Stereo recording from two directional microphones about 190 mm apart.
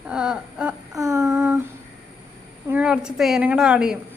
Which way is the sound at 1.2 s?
Centre (ahead or behind).